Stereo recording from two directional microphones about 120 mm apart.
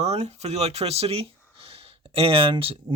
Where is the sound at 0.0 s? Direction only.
65° right (ahead or behind).